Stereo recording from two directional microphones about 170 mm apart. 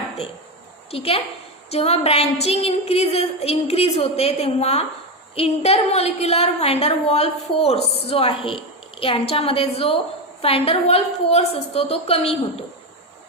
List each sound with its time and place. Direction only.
0.9 s a woman's voice: 35° left (ahead or behind)